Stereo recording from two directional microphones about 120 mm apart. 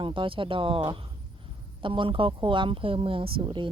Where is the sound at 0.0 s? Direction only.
45° right (ahead or behind).